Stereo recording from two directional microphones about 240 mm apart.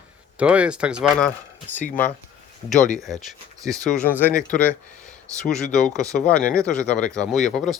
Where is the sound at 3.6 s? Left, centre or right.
Centre.